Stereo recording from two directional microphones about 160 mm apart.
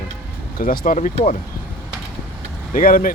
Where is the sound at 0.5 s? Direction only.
60° left (ahead or behind).